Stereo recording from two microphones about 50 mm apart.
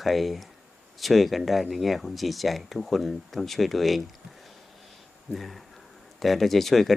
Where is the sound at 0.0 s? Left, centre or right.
Centre.